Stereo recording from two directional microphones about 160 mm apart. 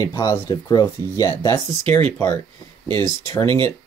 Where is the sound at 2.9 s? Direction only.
30° right (ahead or behind).